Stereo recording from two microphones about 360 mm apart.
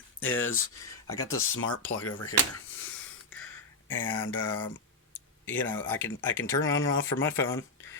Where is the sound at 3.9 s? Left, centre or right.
Left.